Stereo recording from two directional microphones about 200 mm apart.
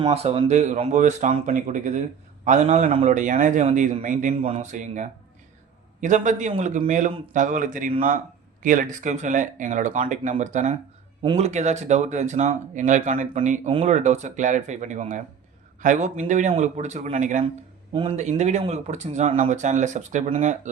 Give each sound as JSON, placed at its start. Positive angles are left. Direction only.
{"t": 0.0, "sound": "speech", "side_deg": -30}